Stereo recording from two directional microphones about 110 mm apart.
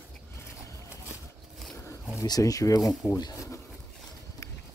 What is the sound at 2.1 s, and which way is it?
Speech, 35° left (ahead or behind).